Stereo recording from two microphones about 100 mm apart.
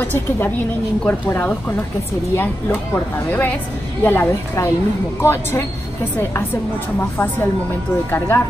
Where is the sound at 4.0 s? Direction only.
20° left (ahead or behind).